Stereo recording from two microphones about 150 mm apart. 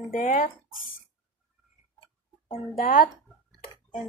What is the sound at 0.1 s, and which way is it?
Speech, 65° left (ahead or behind).